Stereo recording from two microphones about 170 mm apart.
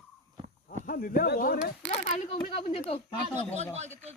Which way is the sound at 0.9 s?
55° left (ahead or behind).